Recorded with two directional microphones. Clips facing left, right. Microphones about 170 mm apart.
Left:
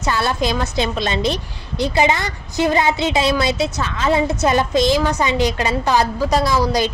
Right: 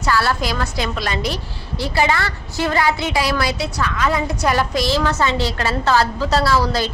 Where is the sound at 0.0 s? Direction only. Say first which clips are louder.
Even; 20° left (ahead or behind).